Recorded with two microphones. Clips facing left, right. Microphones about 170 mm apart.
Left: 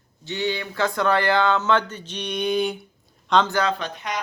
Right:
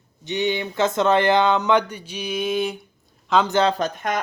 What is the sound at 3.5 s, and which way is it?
Speech, 25° right (ahead or behind).